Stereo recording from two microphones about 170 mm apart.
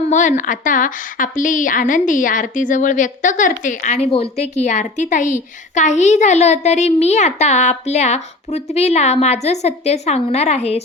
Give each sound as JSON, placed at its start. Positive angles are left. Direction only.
{"t": 0.1, "sound": "a woman's voice", "side_deg": 50}